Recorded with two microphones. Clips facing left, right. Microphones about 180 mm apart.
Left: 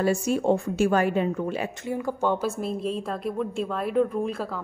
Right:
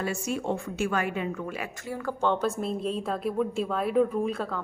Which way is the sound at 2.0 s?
10° left (ahead or behind).